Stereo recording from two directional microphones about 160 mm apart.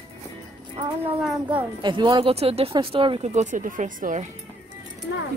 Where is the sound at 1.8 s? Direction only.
30° right (ahead or behind); by 4.3 s 55° right (ahead or behind).